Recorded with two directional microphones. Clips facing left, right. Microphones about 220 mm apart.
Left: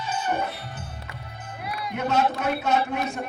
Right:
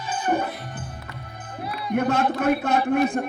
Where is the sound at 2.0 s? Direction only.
55° right (ahead or behind).